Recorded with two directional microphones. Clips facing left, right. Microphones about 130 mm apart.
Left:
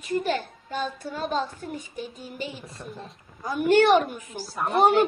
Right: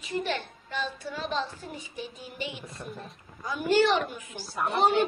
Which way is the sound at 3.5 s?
55° left (ahead or behind).